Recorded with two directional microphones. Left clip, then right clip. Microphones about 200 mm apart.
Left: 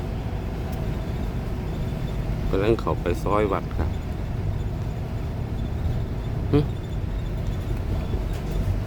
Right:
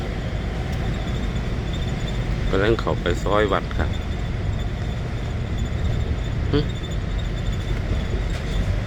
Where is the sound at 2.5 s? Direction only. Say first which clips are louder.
Right 2 dB; 5° left (ahead or behind).